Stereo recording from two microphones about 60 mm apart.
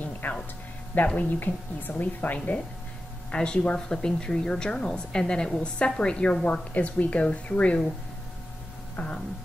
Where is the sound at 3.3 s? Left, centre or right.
Centre.